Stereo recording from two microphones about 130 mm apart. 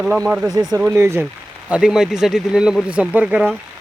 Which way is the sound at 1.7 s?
5° right (ahead or behind).